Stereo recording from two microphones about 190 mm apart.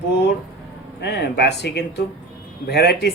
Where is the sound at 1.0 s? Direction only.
60° left (ahead or behind).